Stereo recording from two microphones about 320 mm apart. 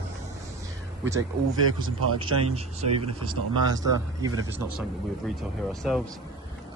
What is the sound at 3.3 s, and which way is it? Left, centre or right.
Speech, centre.